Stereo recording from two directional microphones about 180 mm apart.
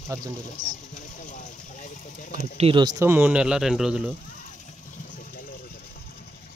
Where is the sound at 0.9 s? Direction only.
45° left (ahead or behind).